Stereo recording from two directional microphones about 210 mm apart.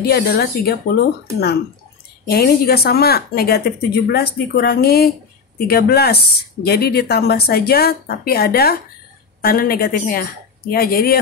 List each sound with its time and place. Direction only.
0.0 s speech: 50° left (ahead or behind)
2.2 s speech: 50° left (ahead or behind)